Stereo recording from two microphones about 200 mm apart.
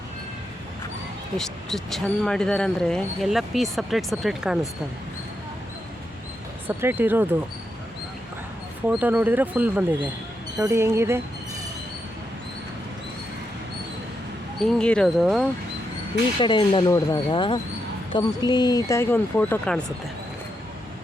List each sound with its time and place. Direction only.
1.4 s speech: centre (ahead or behind)
6.7 s speech: 10° right (ahead or behind)
8.9 s speech: 5° right (ahead or behind)
14.6 s speech: 5° left (ahead or behind)
16.4 s speech: 25° left (ahead or behind); by 19.8 s 5° left (ahead or behind)